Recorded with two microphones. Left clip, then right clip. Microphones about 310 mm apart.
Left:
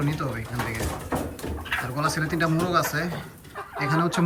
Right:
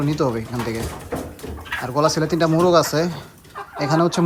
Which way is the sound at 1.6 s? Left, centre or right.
Centre.